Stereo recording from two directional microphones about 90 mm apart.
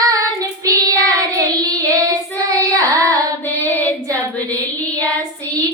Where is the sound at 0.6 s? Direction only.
40° right (ahead or behind).